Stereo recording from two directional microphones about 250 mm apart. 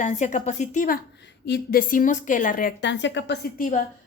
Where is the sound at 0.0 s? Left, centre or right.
Left.